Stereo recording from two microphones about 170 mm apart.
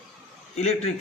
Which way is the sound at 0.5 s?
40° left (ahead or behind).